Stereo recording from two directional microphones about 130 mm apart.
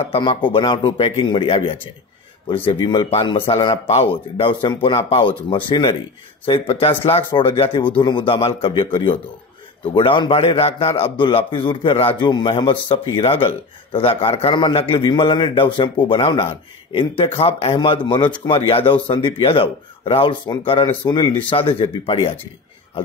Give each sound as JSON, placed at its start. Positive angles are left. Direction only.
{"t": 0.2, "sound": "a man's voice", "side_deg": 40}
{"t": 17.7, "sound": "speech", "side_deg": 40}